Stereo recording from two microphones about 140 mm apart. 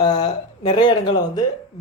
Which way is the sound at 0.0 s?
30° left (ahead or behind).